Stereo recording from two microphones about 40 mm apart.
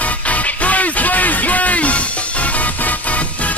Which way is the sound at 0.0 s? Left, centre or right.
Left.